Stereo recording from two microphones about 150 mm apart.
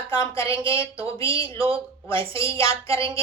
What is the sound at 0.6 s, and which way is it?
Speech, 35° right (ahead or behind).